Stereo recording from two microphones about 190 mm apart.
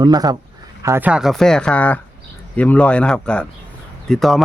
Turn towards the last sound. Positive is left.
turn(degrees=0)  # may be behind; listen again after turning